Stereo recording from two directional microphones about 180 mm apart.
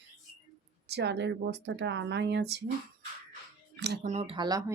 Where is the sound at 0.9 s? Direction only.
70° right (ahead or behind).